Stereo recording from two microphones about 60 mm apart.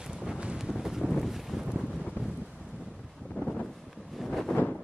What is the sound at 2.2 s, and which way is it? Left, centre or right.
Wind noise, left.